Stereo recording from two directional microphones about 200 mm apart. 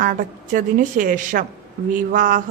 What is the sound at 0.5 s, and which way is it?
A woman's voice, 40° right (ahead or behind).